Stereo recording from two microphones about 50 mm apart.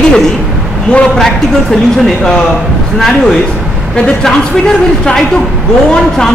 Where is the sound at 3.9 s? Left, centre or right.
Centre.